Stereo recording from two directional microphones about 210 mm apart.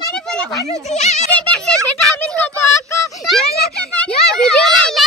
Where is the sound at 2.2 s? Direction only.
5° left (ahead or behind).